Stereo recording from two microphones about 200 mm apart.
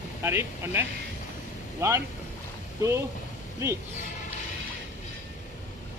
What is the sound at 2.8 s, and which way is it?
Speech, 15° right (ahead or behind).